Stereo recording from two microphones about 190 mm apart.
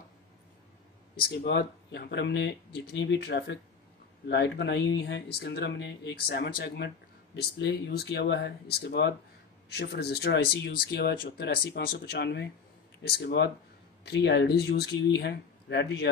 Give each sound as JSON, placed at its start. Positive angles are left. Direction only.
{"t": 1.1, "sound": "speech", "side_deg": 60}